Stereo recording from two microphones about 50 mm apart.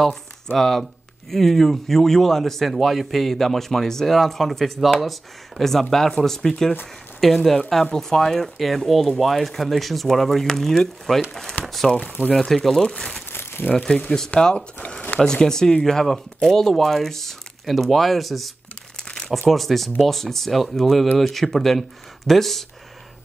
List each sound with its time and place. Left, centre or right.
0.6 s speech: centre
11.9 s speech: left
12.4 s speech: centre
12.8 s speech: centre
13.3 s crumpling: left
14.0 s speech: centre
18.9 s crumpling: centre
19.5 s speech: centre